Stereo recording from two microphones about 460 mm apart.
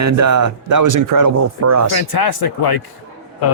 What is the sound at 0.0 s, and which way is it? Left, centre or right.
Speech, right.